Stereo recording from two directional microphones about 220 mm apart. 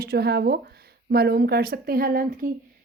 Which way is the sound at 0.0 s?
45° right (ahead or behind).